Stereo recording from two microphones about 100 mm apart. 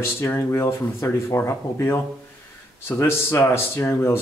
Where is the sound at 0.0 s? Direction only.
25° left (ahead or behind).